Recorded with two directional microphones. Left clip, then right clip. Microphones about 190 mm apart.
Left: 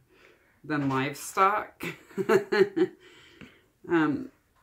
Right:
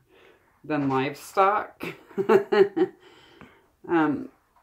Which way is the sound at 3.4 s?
40° left (ahead or behind).